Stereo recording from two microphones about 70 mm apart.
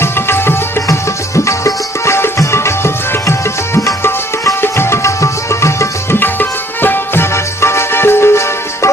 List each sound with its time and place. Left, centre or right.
0.0 s music: left
4.6 s music: left
6.1 s music: left